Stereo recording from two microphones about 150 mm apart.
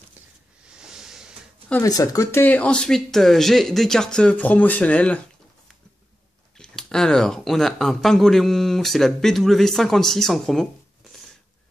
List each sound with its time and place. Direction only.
0.7 s a sound: 5° right (ahead or behind)
1.8 s speech: 25° left (ahead or behind)
6.6 s speech: 5° left (ahead or behind)